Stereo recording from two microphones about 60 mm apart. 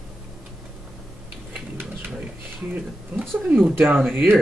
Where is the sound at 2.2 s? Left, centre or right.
Right.